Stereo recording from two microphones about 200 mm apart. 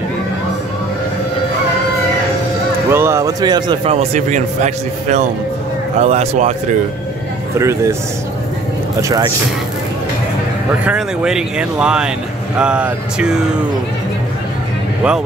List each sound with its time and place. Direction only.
2.9 s a man's voice: 15° right (ahead or behind); by 6.5 s 35° right (ahead or behind)
7.5 s a man's voice: 15° right (ahead or behind)
10.9 s speech: 5° right (ahead or behind)